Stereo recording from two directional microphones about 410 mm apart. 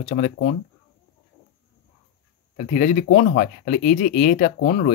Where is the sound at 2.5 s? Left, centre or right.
Centre.